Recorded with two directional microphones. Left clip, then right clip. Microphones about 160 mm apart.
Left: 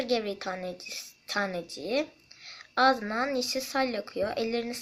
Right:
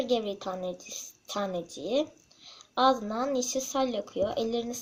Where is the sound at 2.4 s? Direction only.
25° left (ahead or behind).